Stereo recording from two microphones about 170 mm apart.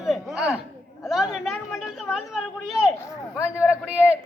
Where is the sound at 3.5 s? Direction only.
5° right (ahead or behind).